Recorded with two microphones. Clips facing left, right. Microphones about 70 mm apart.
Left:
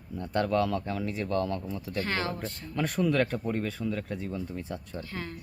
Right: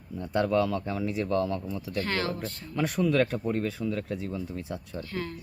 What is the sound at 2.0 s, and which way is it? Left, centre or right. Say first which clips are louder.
Speech: right 1 dB; centre.